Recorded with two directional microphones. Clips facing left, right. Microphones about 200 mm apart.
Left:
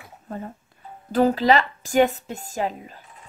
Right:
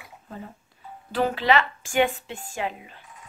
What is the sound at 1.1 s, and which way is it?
A woman's voice, 40° left (ahead or behind).